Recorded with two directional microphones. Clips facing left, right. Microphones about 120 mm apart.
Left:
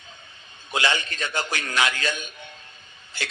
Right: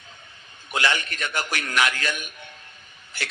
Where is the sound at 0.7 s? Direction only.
25° left (ahead or behind).